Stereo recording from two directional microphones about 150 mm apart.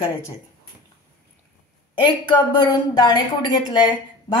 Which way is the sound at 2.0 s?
30° left (ahead or behind).